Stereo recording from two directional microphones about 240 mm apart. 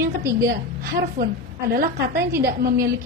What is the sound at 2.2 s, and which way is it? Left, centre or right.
Speech, centre.